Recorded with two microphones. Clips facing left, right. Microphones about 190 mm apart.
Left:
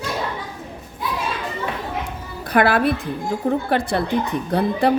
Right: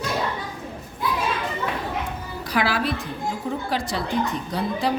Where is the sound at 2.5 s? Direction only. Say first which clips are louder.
Left 7 dB; 55° left (ahead or behind).